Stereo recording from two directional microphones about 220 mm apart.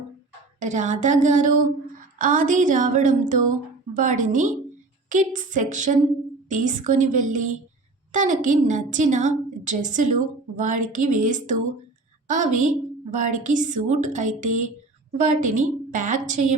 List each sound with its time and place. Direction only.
0.6 s a woman's voice: 35° right (ahead or behind)